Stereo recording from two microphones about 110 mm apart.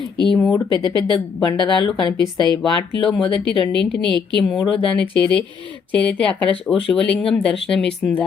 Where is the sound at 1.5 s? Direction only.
45° left (ahead or behind).